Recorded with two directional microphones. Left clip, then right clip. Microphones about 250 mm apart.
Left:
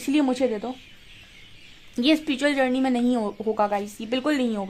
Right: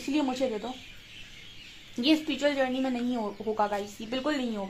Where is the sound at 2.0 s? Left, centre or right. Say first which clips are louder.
Left 4 dB; left.